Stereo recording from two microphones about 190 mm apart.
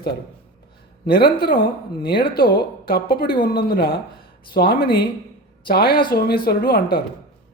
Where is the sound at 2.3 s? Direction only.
55° left (ahead or behind).